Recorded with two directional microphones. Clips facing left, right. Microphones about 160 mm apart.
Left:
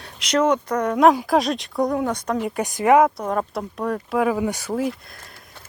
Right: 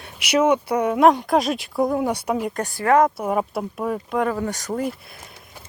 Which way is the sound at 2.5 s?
10° left (ahead or behind).